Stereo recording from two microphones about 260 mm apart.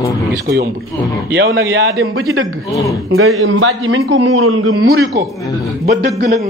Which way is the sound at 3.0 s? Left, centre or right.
Right.